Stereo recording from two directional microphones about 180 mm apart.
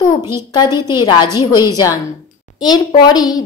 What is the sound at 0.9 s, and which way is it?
A woman's voice, 25° left (ahead or behind).